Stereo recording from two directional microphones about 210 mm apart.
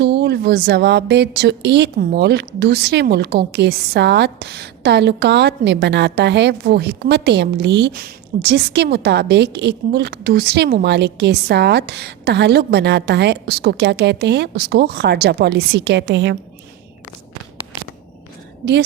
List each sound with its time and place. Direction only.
0.0 s a woman's voice: 50° right (ahead or behind)
18.6 s a woman's voice: 55° right (ahead or behind)